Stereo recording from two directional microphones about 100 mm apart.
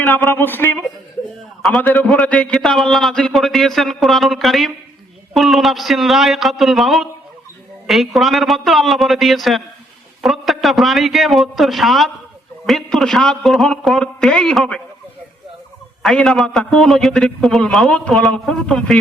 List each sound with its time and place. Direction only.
0.0 s speech: 20° left (ahead or behind)
1.8 s a man's voice: 15° left (ahead or behind)
16.0 s a man's voice: 5° left (ahead or behind)